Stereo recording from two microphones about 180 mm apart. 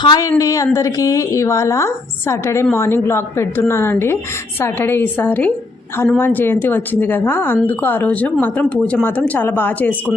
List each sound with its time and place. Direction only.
0.0 s speech: 25° left (ahead or behind)